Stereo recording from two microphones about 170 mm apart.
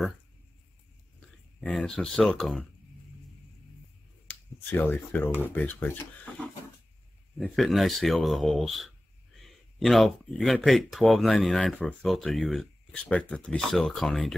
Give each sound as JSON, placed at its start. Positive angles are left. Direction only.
{"t": 1.6, "sound": "speech", "side_deg": 0}
{"t": 4.3, "sound": "speech", "side_deg": 10}
{"t": 7.3, "sound": "speech", "side_deg": 0}